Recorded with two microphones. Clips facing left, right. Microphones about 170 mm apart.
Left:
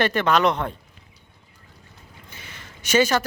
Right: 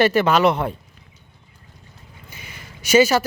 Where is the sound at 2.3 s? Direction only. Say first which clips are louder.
Right 3 dB; 10° right (ahead or behind).